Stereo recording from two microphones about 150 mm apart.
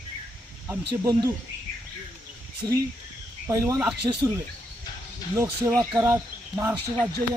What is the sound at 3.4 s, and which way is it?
Speech, 20° right (ahead or behind).